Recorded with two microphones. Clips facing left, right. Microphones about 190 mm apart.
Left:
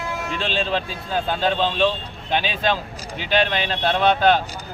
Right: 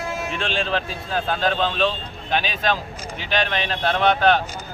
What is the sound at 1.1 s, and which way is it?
Speech, 25° left (ahead or behind).